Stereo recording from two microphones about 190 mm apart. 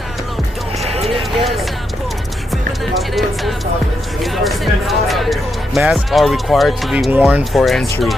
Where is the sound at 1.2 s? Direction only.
Centre (ahead or behind).